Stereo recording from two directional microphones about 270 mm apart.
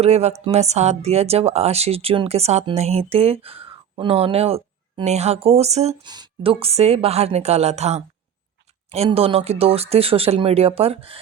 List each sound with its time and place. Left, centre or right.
0.0 s speech: right